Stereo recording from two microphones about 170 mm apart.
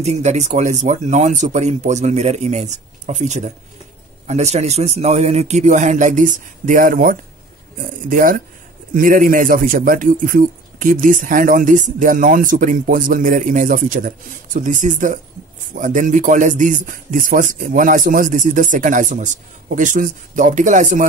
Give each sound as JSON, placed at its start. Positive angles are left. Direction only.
{"t": 0.0, "sound": "a man's voice", "side_deg": -40}